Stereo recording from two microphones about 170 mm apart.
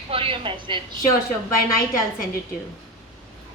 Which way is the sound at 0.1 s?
30° right (ahead or behind).